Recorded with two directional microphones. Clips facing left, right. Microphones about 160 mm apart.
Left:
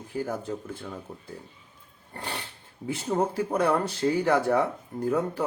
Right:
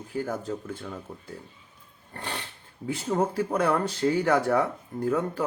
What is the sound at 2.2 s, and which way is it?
Speech, 10° left (ahead or behind).